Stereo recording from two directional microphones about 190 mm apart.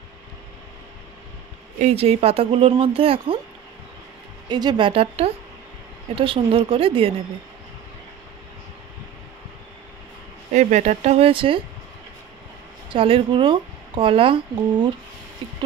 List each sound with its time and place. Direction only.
1.8 s speech: 35° right (ahead or behind)
4.5 s speech: 20° right (ahead or behind)
10.5 s speech: 40° right (ahead or behind)
12.9 s speech: 30° right (ahead or behind)